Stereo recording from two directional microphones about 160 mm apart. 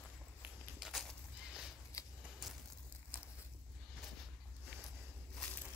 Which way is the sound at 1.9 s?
20° left (ahead or behind).